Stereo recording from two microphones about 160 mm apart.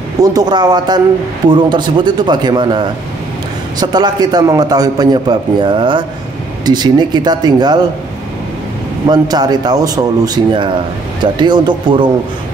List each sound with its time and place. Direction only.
0.2 s a man's voice: 25° right (ahead or behind)
9.0 s a man's voice: 25° right (ahead or behind)